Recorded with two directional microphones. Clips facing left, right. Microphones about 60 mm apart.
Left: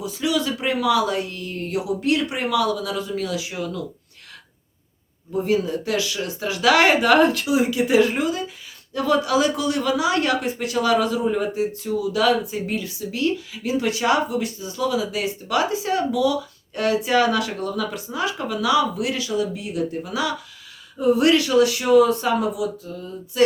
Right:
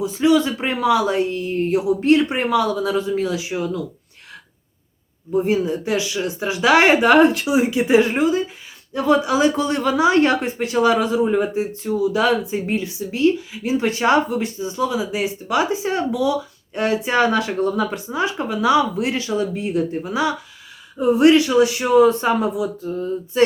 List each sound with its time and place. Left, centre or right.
0.0 s speech: right
5.3 s speech: right